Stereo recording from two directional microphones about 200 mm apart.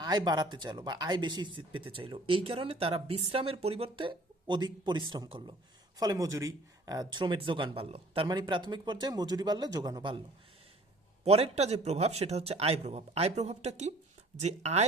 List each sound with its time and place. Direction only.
0.0 s speech: 20° right (ahead or behind)
11.3 s speech: 30° right (ahead or behind)